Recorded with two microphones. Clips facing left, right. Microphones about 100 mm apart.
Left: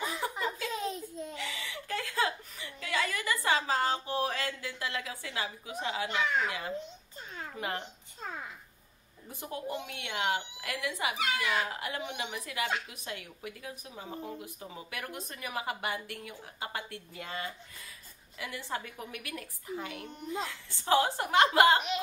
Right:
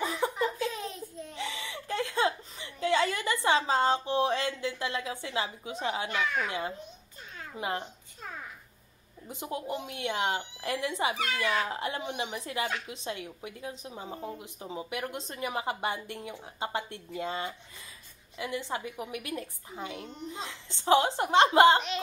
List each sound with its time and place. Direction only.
0.2 s a sound: 30° right (ahead or behind)
1.3 s speech: 25° right (ahead or behind)
6.0 s speech: 25° left (ahead or behind)
7.5 s speech: 20° right (ahead or behind)
9.3 s speech: 20° right (ahead or behind)